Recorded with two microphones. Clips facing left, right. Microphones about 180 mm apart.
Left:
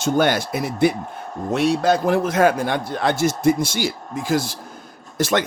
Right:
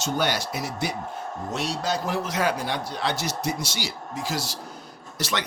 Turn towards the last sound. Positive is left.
turn(degrees=50)  # may be behind; listen again after turning